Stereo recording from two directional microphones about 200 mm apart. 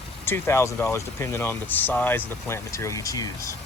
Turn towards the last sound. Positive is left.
turn(degrees=15)  # may be behind; listen again after turning